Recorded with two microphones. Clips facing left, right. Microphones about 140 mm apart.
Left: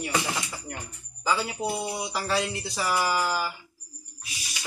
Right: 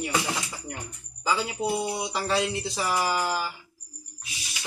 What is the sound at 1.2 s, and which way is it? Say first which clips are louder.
Speech: even; 10° right (ahead or behind).